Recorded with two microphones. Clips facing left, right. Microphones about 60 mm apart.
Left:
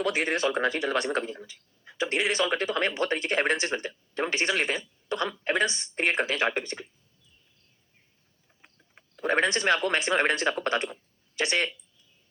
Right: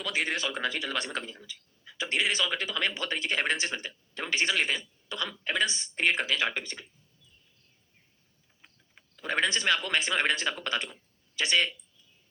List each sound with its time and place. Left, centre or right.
0.0 s speech: left
8.6 s speech: left